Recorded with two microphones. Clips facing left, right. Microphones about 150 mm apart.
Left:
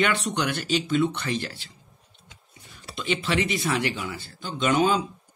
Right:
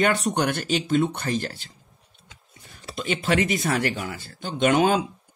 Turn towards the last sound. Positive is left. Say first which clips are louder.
# right 2 dB
turn(degrees=-50)  # may be behind; listen again after turning